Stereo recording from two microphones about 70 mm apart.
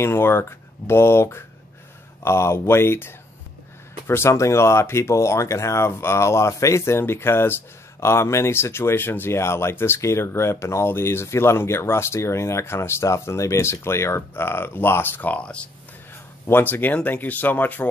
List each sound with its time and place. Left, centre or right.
0.0 s speech: left; by 15.7 s centre
16.4 s speech: left